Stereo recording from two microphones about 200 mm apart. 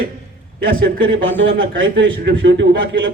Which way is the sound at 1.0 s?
75° right (ahead or behind).